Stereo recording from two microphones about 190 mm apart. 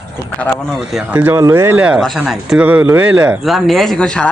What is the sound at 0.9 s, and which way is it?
Speech, 10° right (ahead or behind).